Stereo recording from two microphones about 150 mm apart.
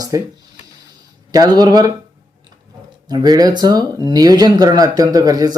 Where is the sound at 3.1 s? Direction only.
25° right (ahead or behind).